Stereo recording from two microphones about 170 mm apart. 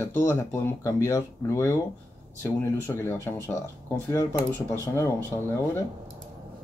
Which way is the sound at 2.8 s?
15° left (ahead or behind).